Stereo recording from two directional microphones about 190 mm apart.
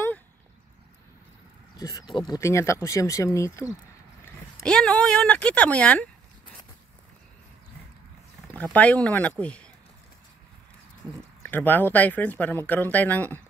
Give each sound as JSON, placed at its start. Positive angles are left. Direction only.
{"t": 1.8, "sound": "speech", "side_deg": 20}
{"t": 4.6, "sound": "speech", "side_deg": 5}
{"t": 8.7, "sound": "speech", "side_deg": 5}
{"t": 11.4, "sound": "speech", "side_deg": 10}